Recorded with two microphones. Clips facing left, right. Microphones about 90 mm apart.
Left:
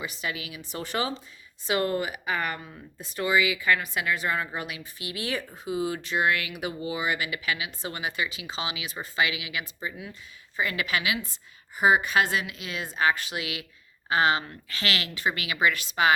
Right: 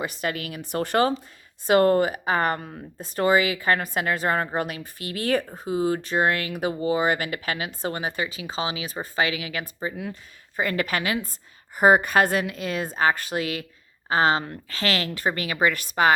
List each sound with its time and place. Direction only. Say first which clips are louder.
0.0 s a woman's voice: right 5 dB; 55° right (ahead or behind)